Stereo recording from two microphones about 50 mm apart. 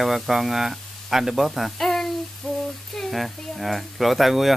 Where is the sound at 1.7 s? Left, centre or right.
Centre.